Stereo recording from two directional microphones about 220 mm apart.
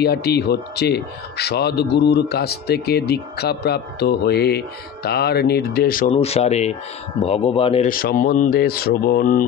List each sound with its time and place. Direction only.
0.0 s speech: 45° left (ahead or behind)
6.0 s speech: 30° left (ahead or behind)
7.9 s speech: 40° left (ahead or behind)